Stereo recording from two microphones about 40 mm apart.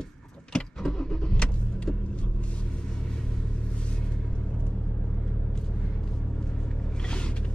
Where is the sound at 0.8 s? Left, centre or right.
Centre.